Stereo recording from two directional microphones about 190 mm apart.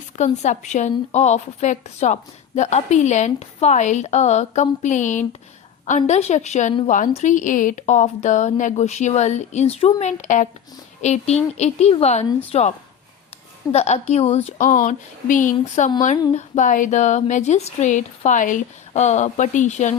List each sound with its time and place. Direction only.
0.4 s a woman's voice: 40° left (ahead or behind)
13.7 s a woman's voice: 35° left (ahead or behind)